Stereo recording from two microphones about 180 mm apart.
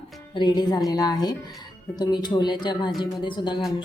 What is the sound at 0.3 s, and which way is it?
Speech, 25° left (ahead or behind).